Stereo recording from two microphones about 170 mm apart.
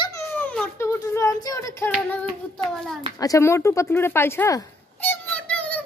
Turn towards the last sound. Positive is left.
turn(degrees=10)  # may be behind; listen again after turning